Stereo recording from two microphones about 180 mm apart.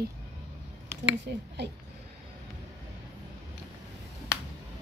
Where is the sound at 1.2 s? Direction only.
70° right (ahead or behind).